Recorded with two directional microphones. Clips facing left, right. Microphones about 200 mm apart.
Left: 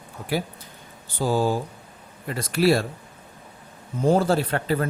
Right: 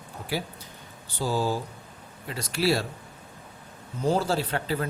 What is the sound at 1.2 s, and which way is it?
Speech, 55° left (ahead or behind).